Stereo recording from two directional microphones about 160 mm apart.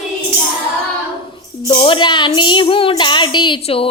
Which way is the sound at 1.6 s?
30° left (ahead or behind).